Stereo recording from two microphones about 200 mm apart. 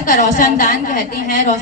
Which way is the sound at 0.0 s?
40° left (ahead or behind).